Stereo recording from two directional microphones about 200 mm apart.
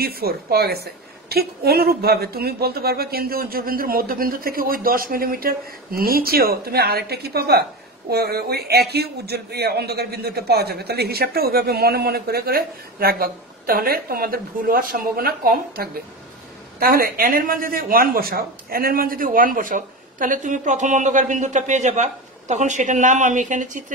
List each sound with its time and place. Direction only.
0.0 s a man's voice: 50° right (ahead or behind)